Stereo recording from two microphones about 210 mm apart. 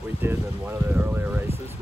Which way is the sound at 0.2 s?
10° right (ahead or behind).